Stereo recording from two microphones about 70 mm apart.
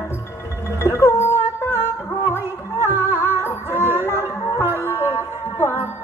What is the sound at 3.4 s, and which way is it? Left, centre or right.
Music, left.